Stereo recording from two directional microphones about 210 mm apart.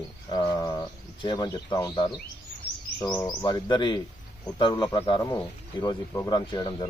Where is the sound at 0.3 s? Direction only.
20° left (ahead or behind).